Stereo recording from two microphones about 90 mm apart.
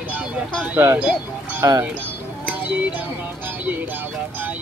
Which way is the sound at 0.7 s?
20° right (ahead or behind).